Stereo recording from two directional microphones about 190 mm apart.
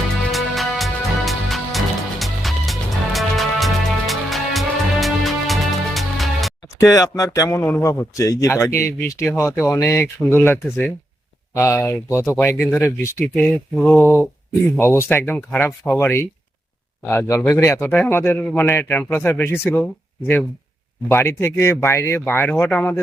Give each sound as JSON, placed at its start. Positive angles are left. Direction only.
{"t": 0.3, "sound": "music", "side_deg": 0}
{"t": 6.7, "sound": "speech", "side_deg": 15}
{"t": 21.1, "sound": "speech", "side_deg": 15}